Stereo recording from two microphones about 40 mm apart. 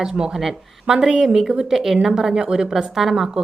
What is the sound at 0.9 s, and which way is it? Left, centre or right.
A woman's voice, centre.